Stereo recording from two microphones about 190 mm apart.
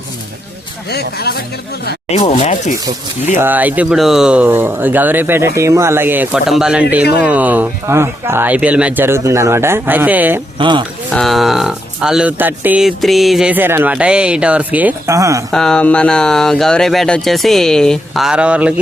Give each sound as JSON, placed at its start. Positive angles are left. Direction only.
{"t": 0.9, "sound": "speech", "side_deg": 60}
{"t": 2.0, "sound": "speech", "side_deg": 35}
{"t": 3.3, "sound": "speech", "side_deg": -10}
{"t": 10.6, "sound": "speech", "side_deg": -25}
{"t": 11.1, "sound": "speech", "side_deg": 0}
{"t": 15.5, "sound": "speech", "side_deg": 5}